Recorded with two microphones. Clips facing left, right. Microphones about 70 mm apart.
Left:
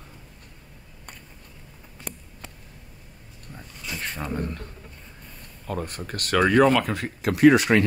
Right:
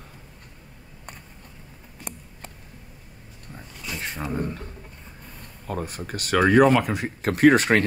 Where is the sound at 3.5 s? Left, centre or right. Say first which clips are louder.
Right 1 dB; centre.